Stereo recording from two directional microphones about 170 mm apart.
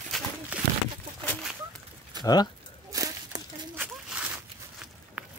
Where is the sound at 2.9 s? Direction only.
20° right (ahead or behind).